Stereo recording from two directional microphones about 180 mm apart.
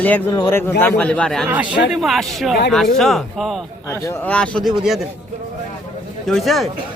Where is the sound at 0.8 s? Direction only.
10° left (ahead or behind).